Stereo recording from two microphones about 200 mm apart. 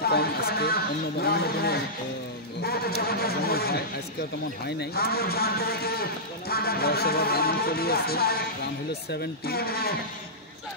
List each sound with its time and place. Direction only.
0.0 s speech: 50° left (ahead or behind)